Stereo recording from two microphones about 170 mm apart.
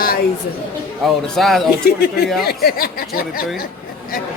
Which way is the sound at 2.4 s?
65° left (ahead or behind).